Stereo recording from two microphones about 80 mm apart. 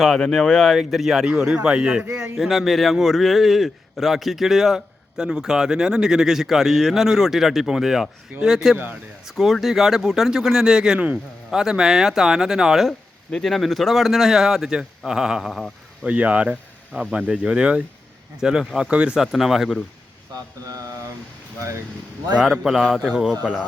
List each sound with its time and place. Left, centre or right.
0.0 s a man's voice: centre
16.0 s a man's voice: centre
20.3 s mantra: right
22.5 s a man's voice: centre